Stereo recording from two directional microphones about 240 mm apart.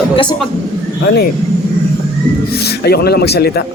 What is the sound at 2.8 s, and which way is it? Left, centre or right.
Speech, left.